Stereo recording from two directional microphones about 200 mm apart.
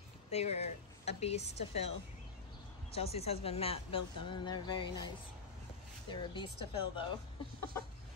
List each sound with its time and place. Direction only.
0.3 s speech: 30° left (ahead or behind)
2.9 s a woman's voice: 30° left (ahead or behind)